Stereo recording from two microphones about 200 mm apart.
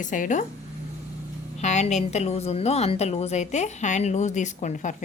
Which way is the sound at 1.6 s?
35° left (ahead or behind).